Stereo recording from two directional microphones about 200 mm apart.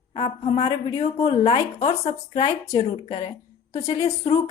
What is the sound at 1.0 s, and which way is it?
Speech, 30° left (ahead or behind).